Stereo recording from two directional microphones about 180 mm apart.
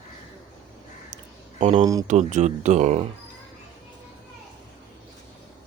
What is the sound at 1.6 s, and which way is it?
Speech, 35° right (ahead or behind).